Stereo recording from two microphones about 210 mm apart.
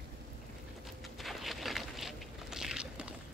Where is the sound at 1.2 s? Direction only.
Centre (ahead or behind).